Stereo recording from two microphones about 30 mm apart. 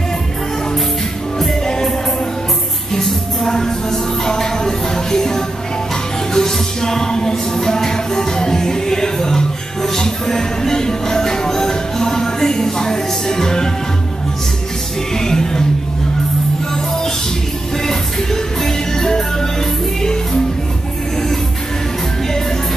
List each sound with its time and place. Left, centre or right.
2.9 s music: centre
15.1 s music: centre
17.8 s music: centre